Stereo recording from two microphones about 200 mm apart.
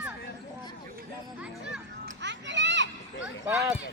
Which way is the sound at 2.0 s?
60° right (ahead or behind).